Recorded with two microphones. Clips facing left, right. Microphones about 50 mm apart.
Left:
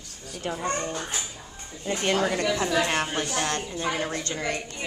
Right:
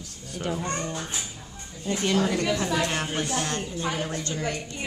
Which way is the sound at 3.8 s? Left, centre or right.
Centre.